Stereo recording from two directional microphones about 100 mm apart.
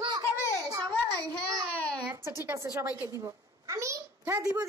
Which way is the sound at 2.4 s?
25° right (ahead or behind).